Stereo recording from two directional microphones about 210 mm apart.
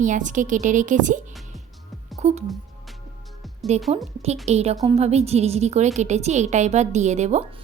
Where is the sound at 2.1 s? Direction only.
30° right (ahead or behind).